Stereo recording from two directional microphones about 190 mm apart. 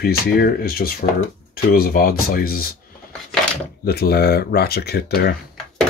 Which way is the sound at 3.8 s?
55° left (ahead or behind).